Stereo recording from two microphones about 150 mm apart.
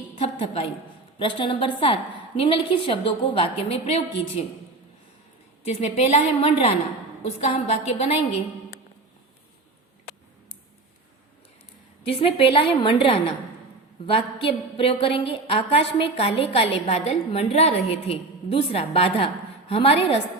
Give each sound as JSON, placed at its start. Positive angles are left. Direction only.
{"t": 0.2, "sound": "a woman's voice", "side_deg": 40}
{"t": 5.6, "sound": "a woman's voice", "side_deg": 45}
{"t": 12.0, "sound": "a woman's voice", "side_deg": 40}